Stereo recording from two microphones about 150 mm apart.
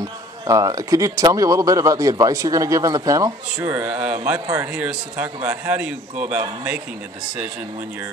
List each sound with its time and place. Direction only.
0.0 s speech: 25° right (ahead or behind)
3.5 s a man's voice: 10° right (ahead or behind)